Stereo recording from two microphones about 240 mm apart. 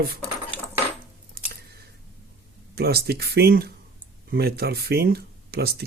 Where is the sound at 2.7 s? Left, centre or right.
Right.